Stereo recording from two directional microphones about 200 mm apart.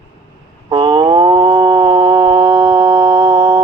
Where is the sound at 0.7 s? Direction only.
25° right (ahead or behind).